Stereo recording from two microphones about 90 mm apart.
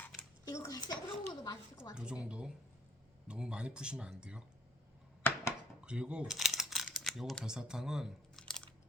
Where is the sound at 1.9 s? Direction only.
10° right (ahead or behind).